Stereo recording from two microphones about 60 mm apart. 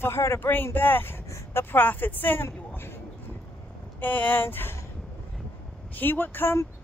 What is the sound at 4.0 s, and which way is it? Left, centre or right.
Speech, left.